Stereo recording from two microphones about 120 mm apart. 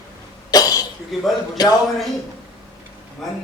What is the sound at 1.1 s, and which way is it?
Speech, centre (ahead or behind).